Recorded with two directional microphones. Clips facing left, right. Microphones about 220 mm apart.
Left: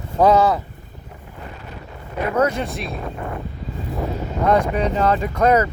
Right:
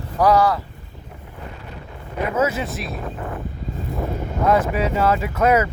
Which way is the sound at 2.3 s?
5° right (ahead or behind).